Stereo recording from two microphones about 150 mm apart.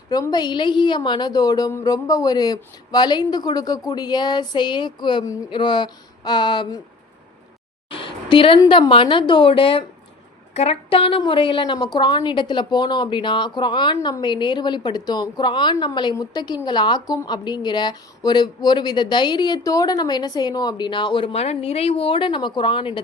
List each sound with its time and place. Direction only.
0.1 s a woman's voice: 25° left (ahead or behind)
7.9 s a sound: 35° left (ahead or behind)
8.6 s a woman's voice: 35° left (ahead or behind)